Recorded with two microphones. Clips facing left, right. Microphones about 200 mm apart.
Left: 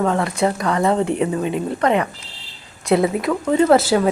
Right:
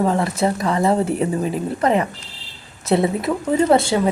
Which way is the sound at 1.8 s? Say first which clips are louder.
Right 1 dB; 35° right (ahead or behind).